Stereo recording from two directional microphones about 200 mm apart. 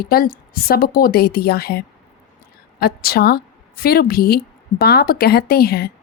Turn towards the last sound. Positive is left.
turn(degrees=50)  # may be behind; listen again after turning